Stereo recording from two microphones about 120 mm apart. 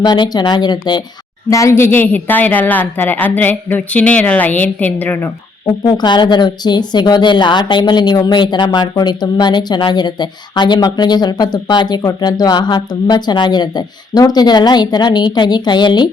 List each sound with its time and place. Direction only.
0.0 s speech: 35° left (ahead or behind)
1.5 s a woman's voice: 25° left (ahead or behind)
5.6 s speech: 35° left (ahead or behind)